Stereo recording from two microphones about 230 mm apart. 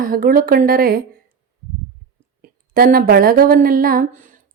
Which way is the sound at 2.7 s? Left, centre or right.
Right.